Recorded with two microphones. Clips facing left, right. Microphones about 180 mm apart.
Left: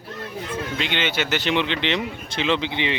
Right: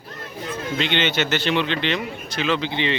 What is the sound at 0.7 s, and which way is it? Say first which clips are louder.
A man's voice: right 4 dB; 5° left (ahead or behind).